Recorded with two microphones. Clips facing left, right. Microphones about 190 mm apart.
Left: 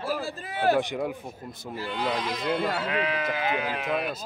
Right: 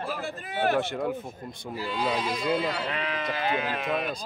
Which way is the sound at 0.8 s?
15° left (ahead or behind).